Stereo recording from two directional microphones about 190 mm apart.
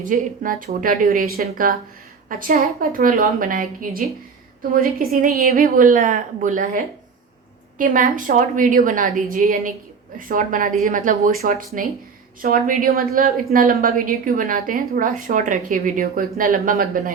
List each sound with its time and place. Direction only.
0.0 s a woman's voice: 45° right (ahead or behind)